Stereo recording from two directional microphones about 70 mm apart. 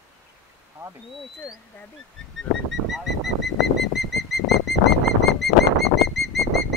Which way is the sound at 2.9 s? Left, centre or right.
Centre.